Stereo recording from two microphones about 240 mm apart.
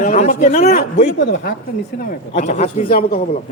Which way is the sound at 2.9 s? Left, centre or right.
Left.